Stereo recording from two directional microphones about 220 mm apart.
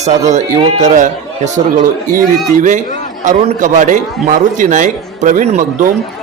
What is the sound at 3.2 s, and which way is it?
Speech, 35° right (ahead or behind).